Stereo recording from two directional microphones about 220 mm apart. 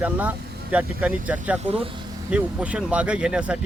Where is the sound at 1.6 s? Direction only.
25° right (ahead or behind).